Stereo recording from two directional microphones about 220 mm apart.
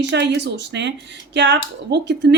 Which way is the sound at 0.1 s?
50° right (ahead or behind).